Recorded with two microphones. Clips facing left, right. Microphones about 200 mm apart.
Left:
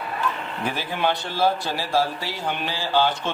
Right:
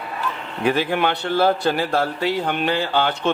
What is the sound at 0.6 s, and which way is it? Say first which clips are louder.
Speech: right 6 dB; 65° right (ahead or behind).